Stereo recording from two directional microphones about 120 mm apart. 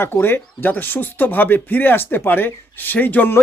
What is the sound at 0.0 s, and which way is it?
A man's voice, 15° left (ahead or behind).